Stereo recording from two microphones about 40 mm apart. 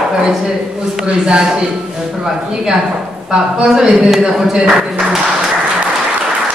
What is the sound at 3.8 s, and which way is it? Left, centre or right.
Speech, centre.